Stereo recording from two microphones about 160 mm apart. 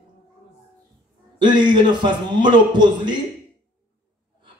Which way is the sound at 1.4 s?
30° right (ahead or behind).